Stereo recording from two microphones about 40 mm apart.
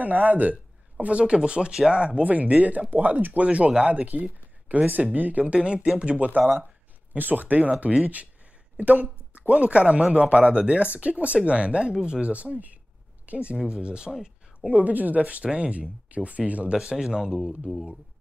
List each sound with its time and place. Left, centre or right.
0.0 s speech: right
2.2 s speech: right
3.4 s speech: right
5.5 s speech: right
8.7 s a sound: right
9.5 s speech: right
12.3 s speech: right
14.1 s a sound: centre
14.7 s speech: right
16.9 s speech: centre